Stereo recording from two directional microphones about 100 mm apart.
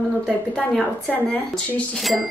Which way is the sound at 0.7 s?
5° left (ahead or behind).